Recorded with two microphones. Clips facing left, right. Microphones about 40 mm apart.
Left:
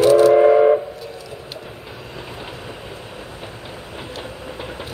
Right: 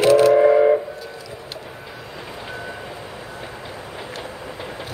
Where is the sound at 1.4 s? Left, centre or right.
Centre.